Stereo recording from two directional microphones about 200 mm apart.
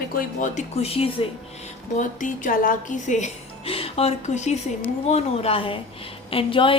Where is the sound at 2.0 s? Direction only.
40° left (ahead or behind).